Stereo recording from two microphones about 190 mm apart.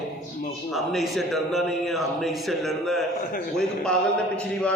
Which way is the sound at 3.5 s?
5° left (ahead or behind).